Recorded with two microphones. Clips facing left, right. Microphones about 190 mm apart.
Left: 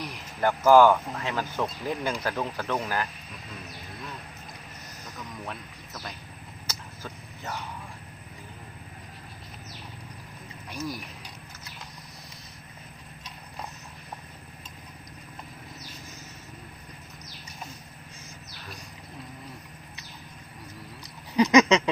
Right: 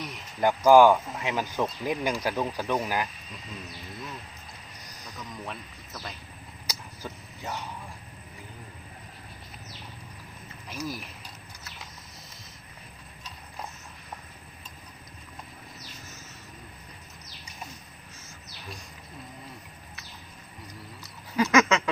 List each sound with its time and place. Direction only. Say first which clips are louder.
0.4 s speech: right 1 dB; 15° right (ahead or behind)
5.5 s speech: left 1 dB; centre (ahead or behind)
6.7 s a sound: right 2 dB; 15° right (ahead or behind)
10.7 s speech: left 1 dB; centre (ahead or behind)
21.0 s duck: left 4 dB; 20° left (ahead or behind)